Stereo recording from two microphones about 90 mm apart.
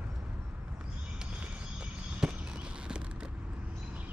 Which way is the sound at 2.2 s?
5° right (ahead or behind).